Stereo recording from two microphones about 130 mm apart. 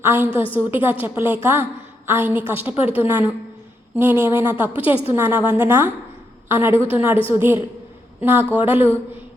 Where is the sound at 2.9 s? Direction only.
15° right (ahead or behind).